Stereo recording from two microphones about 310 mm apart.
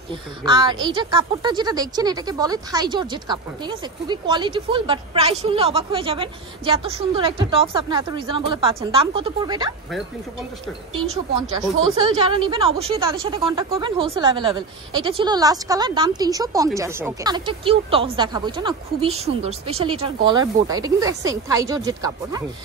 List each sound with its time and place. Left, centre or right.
0.4 s a woman's voice: centre
11.8 s a woman's voice: centre